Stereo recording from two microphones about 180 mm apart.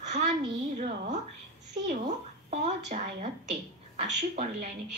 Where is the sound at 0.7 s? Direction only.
45° right (ahead or behind).